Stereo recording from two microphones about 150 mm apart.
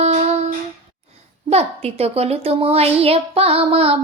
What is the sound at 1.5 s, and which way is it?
A child's voice, 45° right (ahead or behind).